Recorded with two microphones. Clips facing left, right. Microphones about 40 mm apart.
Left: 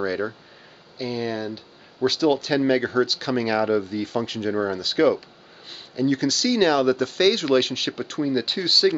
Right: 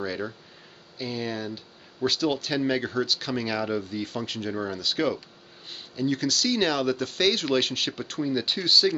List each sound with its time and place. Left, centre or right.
0.0 s speech: centre